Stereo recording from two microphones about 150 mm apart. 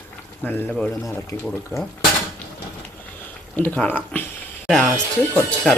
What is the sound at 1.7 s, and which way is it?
Speech, 25° left (ahead or behind).